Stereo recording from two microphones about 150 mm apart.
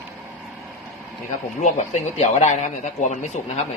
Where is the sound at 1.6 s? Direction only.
50° left (ahead or behind).